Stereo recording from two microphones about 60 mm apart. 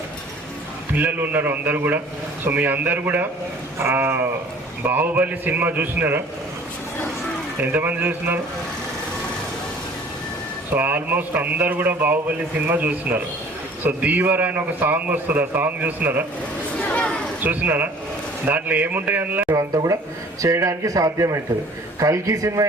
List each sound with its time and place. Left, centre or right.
0.9 s a man's voice: right
3.8 s a man's voice: right
7.6 s a man's voice: right
10.8 s a man's voice: right
16.8 s a sound: centre
17.4 s a man's voice: right
19.5 s a man's voice: right